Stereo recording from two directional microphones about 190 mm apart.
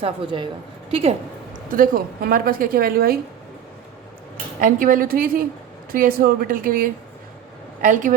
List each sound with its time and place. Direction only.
0.0 s a woman's voice: 25° right (ahead or behind)
1.7 s a woman's voice: 45° right (ahead or behind)
4.6 s a woman's voice: 45° right (ahead or behind)